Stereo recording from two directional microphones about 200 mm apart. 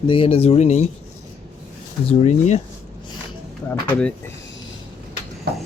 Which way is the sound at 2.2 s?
35° left (ahead or behind).